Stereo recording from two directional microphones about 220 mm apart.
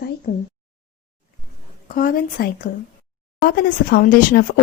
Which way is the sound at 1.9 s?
40° left (ahead or behind).